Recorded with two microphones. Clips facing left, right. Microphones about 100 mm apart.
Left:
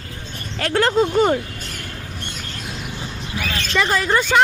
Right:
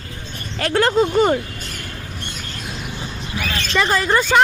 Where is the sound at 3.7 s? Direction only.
35° right (ahead or behind).